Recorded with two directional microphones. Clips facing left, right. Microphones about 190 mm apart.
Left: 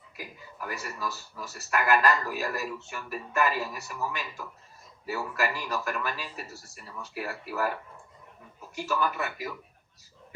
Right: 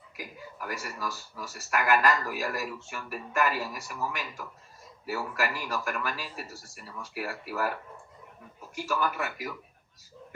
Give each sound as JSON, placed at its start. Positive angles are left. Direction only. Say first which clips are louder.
{"t": 0.2, "sound": "speech", "louder": "even", "side_deg": -10}